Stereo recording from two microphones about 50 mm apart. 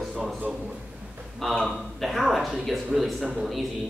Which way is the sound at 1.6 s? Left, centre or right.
Centre.